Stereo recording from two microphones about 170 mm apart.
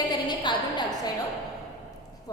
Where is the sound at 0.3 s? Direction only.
25° left (ahead or behind).